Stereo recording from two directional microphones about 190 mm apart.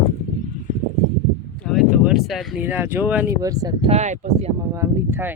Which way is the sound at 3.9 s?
35° right (ahead or behind).